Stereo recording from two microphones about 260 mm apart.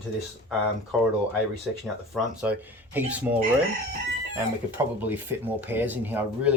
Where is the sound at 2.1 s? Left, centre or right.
Centre.